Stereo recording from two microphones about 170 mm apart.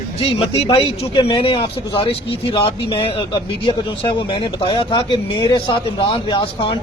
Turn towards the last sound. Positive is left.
turn(degrees=30)  # may be behind; listen again after turning